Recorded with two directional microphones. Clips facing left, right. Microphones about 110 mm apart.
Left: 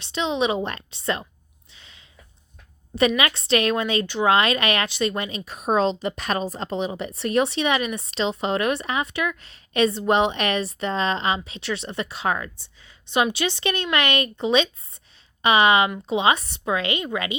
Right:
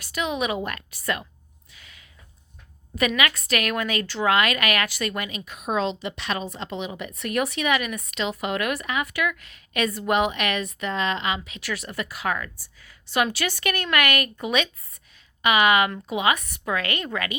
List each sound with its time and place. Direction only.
0.0 s a woman's voice: 25° left (ahead or behind)
1.7 s a sound: 25° left (ahead or behind)
2.9 s a woman's voice: 30° left (ahead or behind)